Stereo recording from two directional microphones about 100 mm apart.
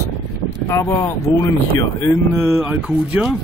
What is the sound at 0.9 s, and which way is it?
A man's voice, 30° left (ahead or behind).